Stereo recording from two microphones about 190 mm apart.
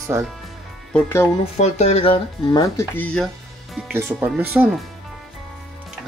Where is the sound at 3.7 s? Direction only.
5° right (ahead or behind).